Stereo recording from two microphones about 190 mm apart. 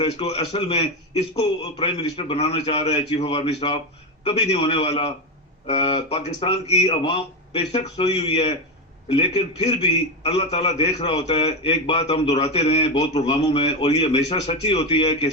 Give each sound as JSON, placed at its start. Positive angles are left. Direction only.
{"t": 0.0, "sound": "a man's voice", "side_deg": 30}